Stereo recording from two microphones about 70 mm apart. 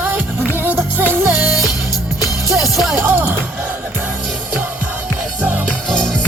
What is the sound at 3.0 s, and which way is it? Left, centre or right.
Music, right.